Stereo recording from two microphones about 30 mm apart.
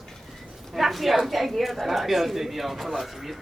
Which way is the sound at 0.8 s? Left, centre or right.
Centre.